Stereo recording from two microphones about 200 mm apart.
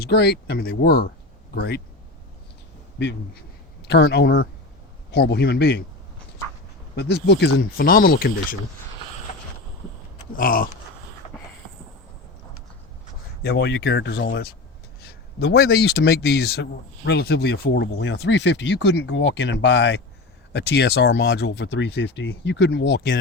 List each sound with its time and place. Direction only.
0.0 s speech: 55° left (ahead or behind)
3.0 s speech: 60° left (ahead or behind)
6.9 s speech: 55° left (ahead or behind)
9.3 s vehicle: 45° left (ahead or behind)
10.3 s speech: 45° left (ahead or behind)
13.4 s speech: 55° left (ahead or behind)